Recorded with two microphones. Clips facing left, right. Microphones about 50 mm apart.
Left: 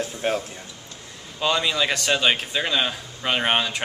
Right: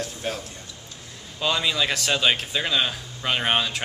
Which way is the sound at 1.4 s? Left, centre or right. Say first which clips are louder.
Left 2 dB; centre.